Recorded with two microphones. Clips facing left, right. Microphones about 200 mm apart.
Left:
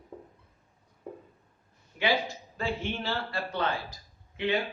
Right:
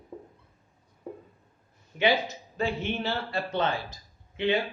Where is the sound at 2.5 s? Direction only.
20° right (ahead or behind).